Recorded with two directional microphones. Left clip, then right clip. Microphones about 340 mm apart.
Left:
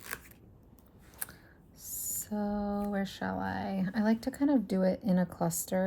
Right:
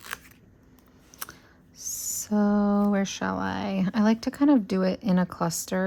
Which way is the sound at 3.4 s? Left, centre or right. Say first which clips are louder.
Right 6 dB; centre.